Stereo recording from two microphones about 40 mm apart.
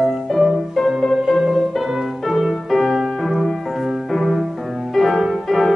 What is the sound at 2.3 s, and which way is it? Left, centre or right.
Music, centre.